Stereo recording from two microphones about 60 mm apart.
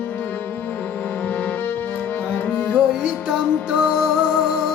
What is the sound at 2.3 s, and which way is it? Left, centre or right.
Music, left.